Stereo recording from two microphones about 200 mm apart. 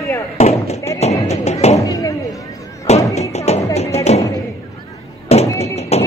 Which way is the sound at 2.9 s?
35° left (ahead or behind).